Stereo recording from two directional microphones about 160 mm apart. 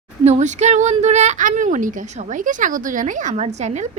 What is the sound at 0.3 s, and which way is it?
A woman's voice, 45° right (ahead or behind).